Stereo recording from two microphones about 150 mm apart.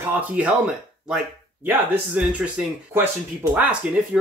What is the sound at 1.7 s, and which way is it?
Speech, 10° right (ahead or behind).